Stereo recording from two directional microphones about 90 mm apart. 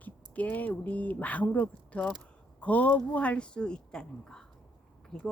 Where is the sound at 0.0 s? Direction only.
15° left (ahead or behind).